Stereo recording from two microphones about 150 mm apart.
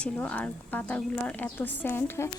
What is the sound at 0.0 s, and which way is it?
A woman's voice, 10° left (ahead or behind).